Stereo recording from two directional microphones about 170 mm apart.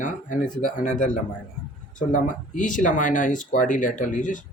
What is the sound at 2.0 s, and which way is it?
Speech, 50° left (ahead or behind).